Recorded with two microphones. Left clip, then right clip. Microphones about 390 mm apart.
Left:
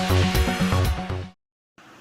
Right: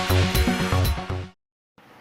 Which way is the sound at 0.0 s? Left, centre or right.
Centre.